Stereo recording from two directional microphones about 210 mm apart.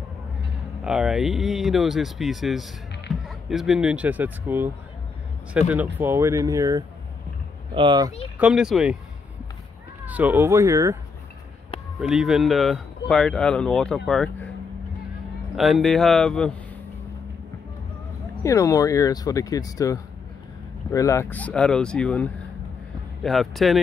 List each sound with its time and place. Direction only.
0.8 s speech: 5° right (ahead or behind)
5.7 s speech: 10° right (ahead or behind)
8.4 s speech: 5° right (ahead or behind)
10.0 s speech: 5° right (ahead or behind)
12.0 s speech: centre (ahead or behind)
15.5 s speech: centre (ahead or behind)
18.4 s speech: 15° left (ahead or behind)